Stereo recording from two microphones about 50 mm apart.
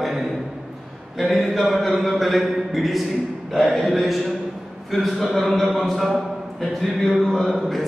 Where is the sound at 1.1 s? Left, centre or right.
Centre.